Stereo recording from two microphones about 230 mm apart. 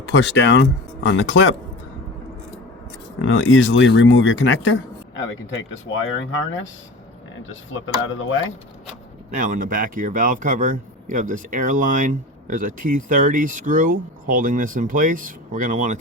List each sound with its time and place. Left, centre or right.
0.1 s speech: left
3.2 s speech: left
7.4 s speech: left
9.3 s speech: right